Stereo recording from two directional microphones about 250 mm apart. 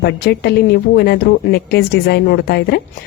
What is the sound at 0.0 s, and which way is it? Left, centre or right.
Speech, left.